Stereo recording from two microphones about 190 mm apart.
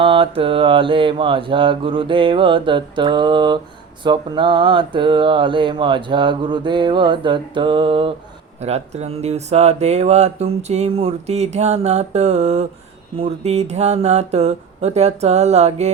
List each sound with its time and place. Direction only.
0.0 s mantra: 30° right (ahead or behind)
8.6 s speech: 35° right (ahead or behind)